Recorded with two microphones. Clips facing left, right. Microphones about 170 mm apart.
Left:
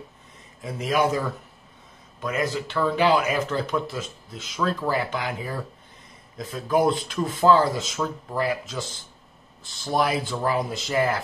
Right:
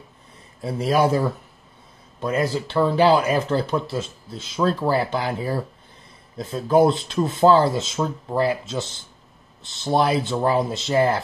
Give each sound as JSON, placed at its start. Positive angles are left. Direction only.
{"t": 0.6, "sound": "speech", "side_deg": -35}